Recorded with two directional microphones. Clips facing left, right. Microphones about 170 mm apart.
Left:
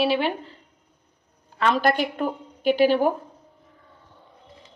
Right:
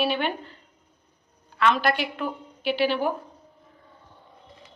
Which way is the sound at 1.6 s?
40° left (ahead or behind).